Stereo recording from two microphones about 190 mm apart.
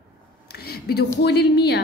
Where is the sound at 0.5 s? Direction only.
55° left (ahead or behind).